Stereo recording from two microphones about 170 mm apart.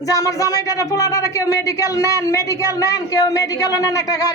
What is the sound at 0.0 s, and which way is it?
Speech, 20° left (ahead or behind).